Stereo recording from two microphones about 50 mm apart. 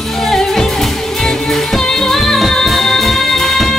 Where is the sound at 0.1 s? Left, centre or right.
Centre.